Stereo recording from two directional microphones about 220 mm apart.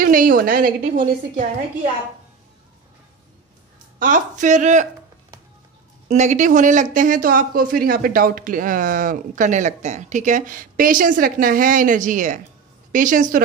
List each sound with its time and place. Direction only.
0.0 s speech: 40° right (ahead or behind)
4.0 s speech: 35° right (ahead or behind)
6.0 s speech: 30° right (ahead or behind)